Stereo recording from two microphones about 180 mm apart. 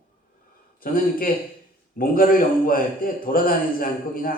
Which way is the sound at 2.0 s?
50° left (ahead or behind).